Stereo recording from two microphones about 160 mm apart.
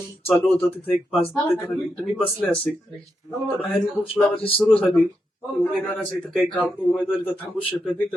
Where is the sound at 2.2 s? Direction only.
5° left (ahead or behind).